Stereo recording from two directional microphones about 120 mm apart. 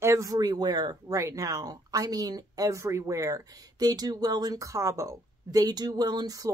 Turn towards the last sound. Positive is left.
turn(degrees=-30)  # may be behind; listen again after turning